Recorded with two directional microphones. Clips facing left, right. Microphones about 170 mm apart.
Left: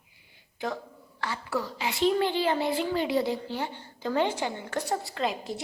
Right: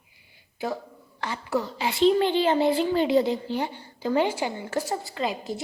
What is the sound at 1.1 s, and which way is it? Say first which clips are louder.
Speech: right 4 dB; 20° right (ahead or behind).